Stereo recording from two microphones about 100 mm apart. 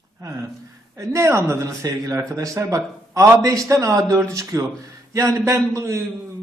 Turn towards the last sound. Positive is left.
turn(degrees=-30)  # may be behind; listen again after turning